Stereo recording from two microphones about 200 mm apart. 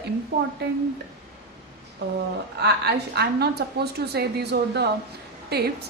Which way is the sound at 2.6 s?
55° right (ahead or behind).